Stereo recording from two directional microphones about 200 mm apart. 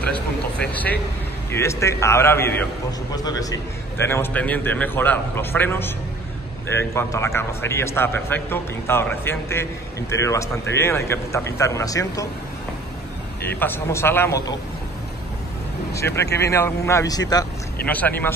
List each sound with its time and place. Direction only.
0.0 s a man's voice: 5° left (ahead or behind)
13.6 s a man's voice: 10° left (ahead or behind)
15.9 s a man's voice: 15° left (ahead or behind)
17.8 s a man's voice: 10° left (ahead or behind)